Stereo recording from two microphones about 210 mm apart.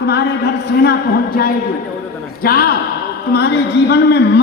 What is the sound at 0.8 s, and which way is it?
A man's voice, 50° left (ahead or behind).